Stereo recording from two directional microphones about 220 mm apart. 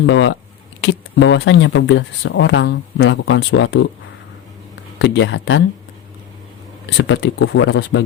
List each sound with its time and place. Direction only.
0.0 s speech: 55° left (ahead or behind)
4.9 s speech: 50° left (ahead or behind)
6.9 s speech: 55° left (ahead or behind)